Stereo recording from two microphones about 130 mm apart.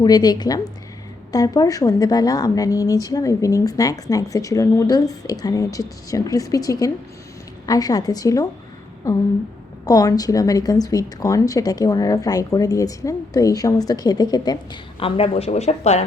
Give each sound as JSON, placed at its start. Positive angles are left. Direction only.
{"t": 0.0, "sound": "a woman's voice", "side_deg": 30}
{"t": 9.8, "sound": "speech", "side_deg": 30}